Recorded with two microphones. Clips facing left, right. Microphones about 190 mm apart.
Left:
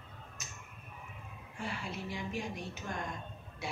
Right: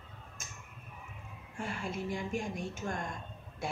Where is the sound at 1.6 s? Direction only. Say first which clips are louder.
Right 3 dB; 50° right (ahead or behind).